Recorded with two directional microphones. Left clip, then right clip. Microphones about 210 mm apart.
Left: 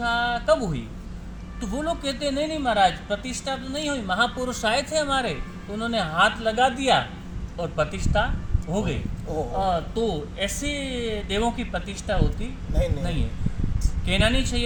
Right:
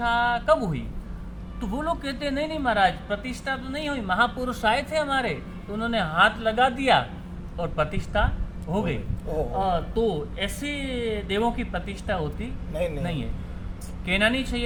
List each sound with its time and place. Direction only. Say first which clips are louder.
0.0 s a sound: right 1 dB; centre (ahead or behind)
1.6 s a woman's voice: left 1 dB; centre (ahead or behind)
14.1 s a woman's voice: even; 5° left (ahead or behind)